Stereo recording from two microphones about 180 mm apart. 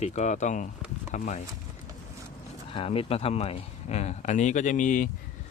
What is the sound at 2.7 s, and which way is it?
Speech, 30° left (ahead or behind).